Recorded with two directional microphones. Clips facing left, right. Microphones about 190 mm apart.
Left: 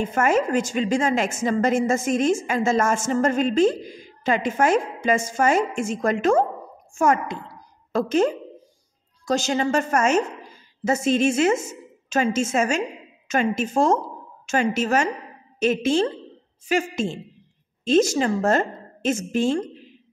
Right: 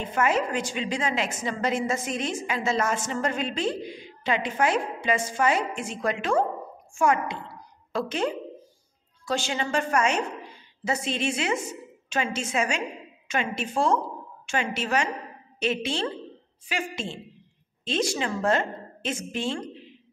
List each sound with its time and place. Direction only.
0.0 s a woman's voice: 45° left (ahead or behind)